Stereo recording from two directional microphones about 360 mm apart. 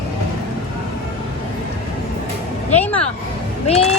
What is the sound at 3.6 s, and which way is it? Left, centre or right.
Music, centre.